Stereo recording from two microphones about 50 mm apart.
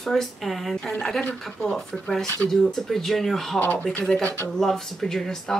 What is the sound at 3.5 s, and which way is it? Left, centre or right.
Speech, left.